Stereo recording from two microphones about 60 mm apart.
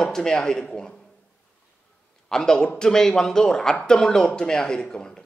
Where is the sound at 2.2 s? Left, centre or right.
Centre.